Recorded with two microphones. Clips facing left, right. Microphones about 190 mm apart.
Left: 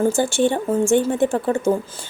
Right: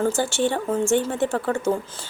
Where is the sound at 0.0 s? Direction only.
15° left (ahead or behind).